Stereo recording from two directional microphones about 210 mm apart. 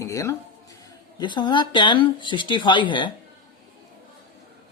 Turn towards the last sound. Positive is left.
turn(degrees=20)  # may be behind; listen again after turning